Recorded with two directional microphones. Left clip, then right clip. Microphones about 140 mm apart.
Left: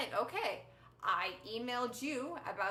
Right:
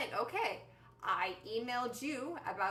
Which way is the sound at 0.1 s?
25° left (ahead or behind).